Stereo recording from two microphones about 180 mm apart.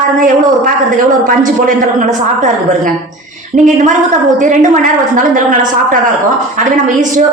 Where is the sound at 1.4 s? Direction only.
45° right (ahead or behind).